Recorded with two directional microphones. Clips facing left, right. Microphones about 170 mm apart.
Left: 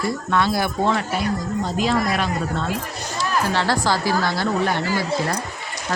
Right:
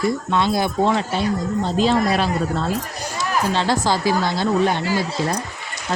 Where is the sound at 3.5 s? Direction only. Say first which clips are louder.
Right 1 dB; 20° right (ahead or behind).